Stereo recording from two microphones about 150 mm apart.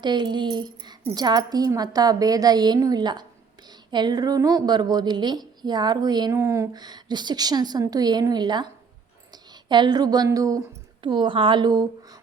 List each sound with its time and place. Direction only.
0.0 s a woman's voice: 30° right (ahead or behind)
11.0 s a woman's voice: 30° right (ahead or behind)